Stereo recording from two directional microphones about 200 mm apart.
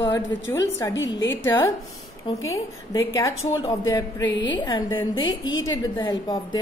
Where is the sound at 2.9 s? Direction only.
15° left (ahead or behind).